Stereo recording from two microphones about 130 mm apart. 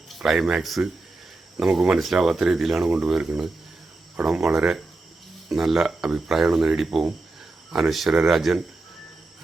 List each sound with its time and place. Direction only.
0.2 s speech: 5° right (ahead or behind)